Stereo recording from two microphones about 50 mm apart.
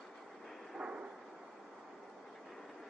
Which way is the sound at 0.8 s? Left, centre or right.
Right.